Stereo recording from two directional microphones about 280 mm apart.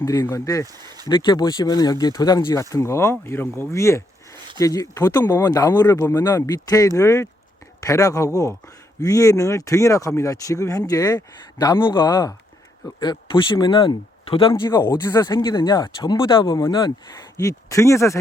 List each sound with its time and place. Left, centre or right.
0.0 s speech: centre